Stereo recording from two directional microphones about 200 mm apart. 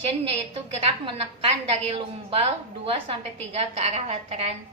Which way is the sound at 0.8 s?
30° right (ahead or behind).